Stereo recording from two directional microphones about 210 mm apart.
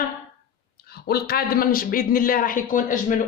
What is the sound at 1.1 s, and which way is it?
Speech, 45° left (ahead or behind).